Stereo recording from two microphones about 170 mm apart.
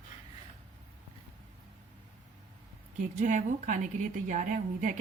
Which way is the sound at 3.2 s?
50° right (ahead or behind).